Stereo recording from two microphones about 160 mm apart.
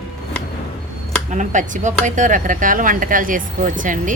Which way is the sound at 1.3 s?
50° right (ahead or behind).